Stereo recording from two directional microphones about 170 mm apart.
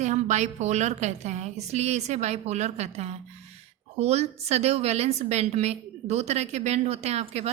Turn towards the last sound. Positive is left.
turn(degrees=-40)  # may be behind; listen again after turning